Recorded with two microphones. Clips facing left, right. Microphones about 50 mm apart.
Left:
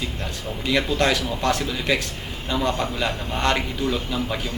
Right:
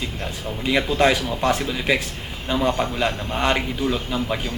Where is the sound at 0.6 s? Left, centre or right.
Centre.